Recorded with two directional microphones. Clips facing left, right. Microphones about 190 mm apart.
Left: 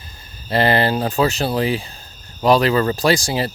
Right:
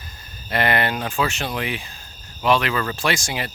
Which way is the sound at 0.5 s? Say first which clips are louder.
Left 5 dB; 30° left (ahead or behind).